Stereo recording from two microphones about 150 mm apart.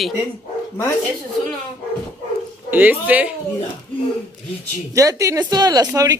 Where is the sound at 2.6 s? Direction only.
10° right (ahead or behind).